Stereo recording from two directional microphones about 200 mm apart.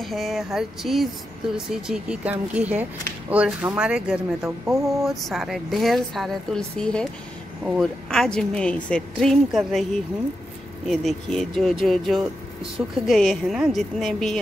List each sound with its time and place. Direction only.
0.0 s speech: centre (ahead or behind)
10.9 s speech: centre (ahead or behind)